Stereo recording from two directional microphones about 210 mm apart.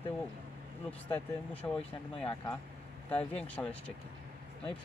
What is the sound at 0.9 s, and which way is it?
Speech, 5° left (ahead or behind).